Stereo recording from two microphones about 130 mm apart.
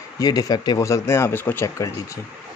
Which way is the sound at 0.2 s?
30° left (ahead or behind).